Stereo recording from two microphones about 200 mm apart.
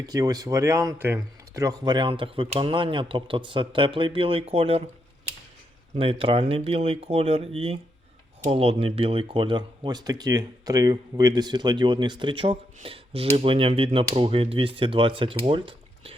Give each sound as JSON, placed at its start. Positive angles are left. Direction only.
{"t": 0.0, "sound": "speech", "side_deg": -20}
{"t": 6.0, "sound": "speech", "side_deg": -25}